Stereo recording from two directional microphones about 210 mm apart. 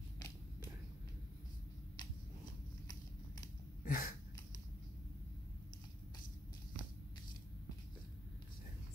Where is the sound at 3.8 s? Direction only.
45° left (ahead or behind).